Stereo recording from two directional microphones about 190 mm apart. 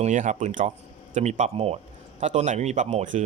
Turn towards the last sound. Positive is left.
turn(degrees=-40)  # may be behind; listen again after turning